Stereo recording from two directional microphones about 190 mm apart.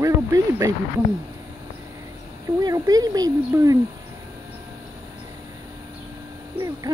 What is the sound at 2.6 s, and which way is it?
Speech, 20° right (ahead or behind).